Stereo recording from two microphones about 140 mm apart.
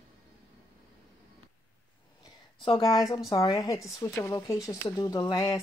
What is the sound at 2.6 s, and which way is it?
Speech, 35° left (ahead or behind).